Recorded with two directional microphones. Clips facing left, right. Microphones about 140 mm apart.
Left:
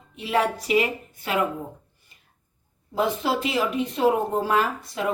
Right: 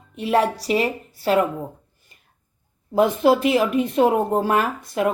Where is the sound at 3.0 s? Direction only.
50° right (ahead or behind).